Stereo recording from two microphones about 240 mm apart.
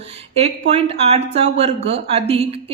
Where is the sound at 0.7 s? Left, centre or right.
Right.